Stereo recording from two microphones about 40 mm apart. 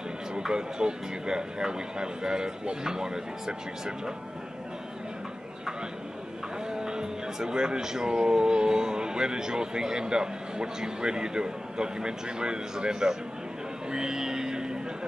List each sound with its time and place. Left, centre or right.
0.4 s speech: centre
6.7 s speech: centre
13.8 s music: centre